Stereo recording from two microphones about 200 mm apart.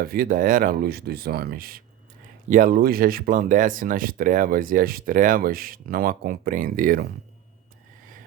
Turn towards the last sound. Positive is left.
turn(degrees=-45)  # may be behind; listen again after turning